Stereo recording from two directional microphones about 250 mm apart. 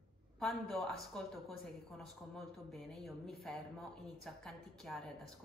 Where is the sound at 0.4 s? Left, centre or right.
Centre.